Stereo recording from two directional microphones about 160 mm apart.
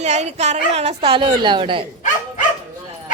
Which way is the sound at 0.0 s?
45° right (ahead or behind).